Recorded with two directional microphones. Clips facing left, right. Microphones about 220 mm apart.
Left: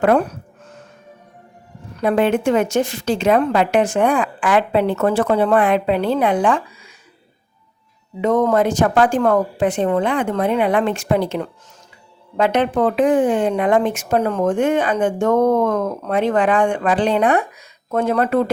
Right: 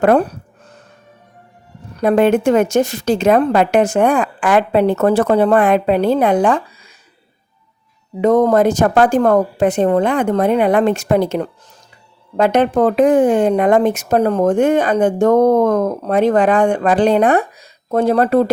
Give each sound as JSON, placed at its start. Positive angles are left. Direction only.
{"t": 0.0, "sound": "a sound", "side_deg": -35}
{"t": 2.0, "sound": "a woman's voice", "side_deg": -45}
{"t": 8.2, "sound": "speech", "side_deg": -40}